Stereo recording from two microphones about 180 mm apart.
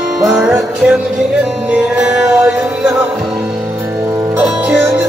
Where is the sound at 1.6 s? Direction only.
5° right (ahead or behind).